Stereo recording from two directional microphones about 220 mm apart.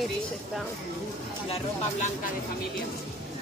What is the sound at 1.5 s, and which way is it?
Speech, 30° left (ahead or behind).